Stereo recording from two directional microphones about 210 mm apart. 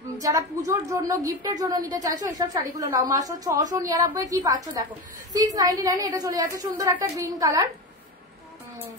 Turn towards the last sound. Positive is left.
turn(degrees=-15)  # may be behind; listen again after turning